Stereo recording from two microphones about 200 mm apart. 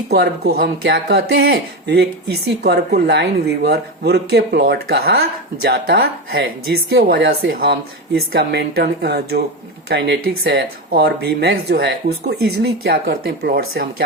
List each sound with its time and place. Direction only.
0.1 s speech: 55° right (ahead or behind)